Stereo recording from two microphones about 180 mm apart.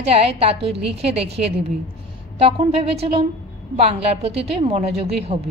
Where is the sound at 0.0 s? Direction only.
35° right (ahead or behind).